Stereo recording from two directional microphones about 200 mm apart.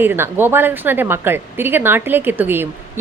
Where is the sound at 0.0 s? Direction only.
10° right (ahead or behind).